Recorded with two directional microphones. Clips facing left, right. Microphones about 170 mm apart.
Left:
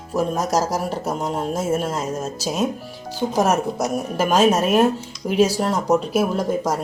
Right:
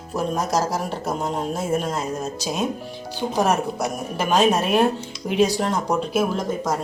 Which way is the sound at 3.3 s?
10° left (ahead or behind).